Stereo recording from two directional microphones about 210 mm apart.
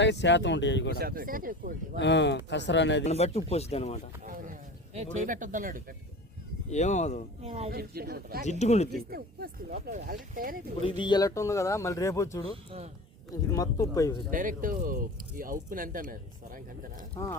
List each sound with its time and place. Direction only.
0.0 s speech: 55° left (ahead or behind)
0.9 s speech: 45° right (ahead or behind)
2.0 s speech: 60° left (ahead or behind)
3.0 s speech: 30° left (ahead or behind)
4.2 s a sound: 40° right (ahead or behind)
4.9 s speech: 40° right (ahead or behind)
6.7 s speech: 35° left (ahead or behind)
7.4 s speech: 30° right (ahead or behind)
7.7 s speech: 45° right (ahead or behind)
8.4 s speech: 30° left (ahead or behind)
9.0 s speech: 45° right (ahead or behind)
10.8 s speech: 20° left (ahead or behind)
14.3 s speech: 40° right (ahead or behind)